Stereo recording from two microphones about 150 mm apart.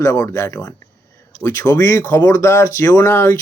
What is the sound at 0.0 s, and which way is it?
Speech, 20° left (ahead or behind).